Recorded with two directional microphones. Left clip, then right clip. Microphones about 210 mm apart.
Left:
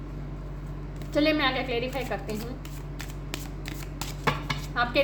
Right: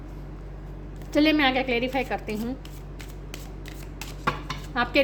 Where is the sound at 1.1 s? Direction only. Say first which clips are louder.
Right 3 dB; 45° right (ahead or behind).